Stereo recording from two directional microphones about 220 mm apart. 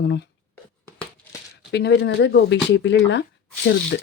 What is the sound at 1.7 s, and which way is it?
Speech, 50° left (ahead or behind).